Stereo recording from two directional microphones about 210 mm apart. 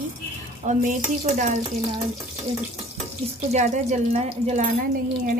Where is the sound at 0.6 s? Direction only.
35° right (ahead or behind).